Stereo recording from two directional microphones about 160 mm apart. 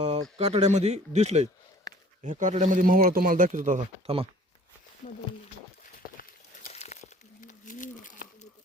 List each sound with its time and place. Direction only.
0.3 s speech: 40° right (ahead or behind); by 3.8 s 55° right (ahead or behind)
4.0 s speech: 35° right (ahead or behind)
5.0 s speech: 55° left (ahead or behind)
6.7 s crumpling: 45° left (ahead or behind)